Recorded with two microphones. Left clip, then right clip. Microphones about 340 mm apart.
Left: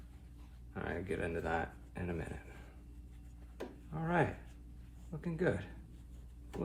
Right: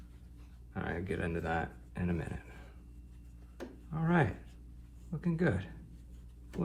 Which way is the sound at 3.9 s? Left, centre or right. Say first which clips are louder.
Right 2 dB; centre.